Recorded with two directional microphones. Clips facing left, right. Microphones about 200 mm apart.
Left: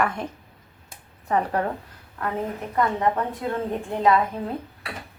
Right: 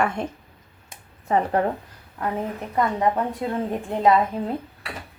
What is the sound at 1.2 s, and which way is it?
Speech, 25° right (ahead or behind).